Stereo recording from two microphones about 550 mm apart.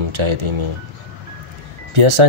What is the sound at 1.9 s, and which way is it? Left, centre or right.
Speech, right.